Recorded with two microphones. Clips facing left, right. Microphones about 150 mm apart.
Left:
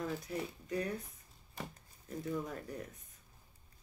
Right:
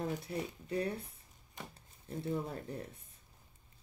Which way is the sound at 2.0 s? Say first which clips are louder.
Right 1 dB; 30° right (ahead or behind).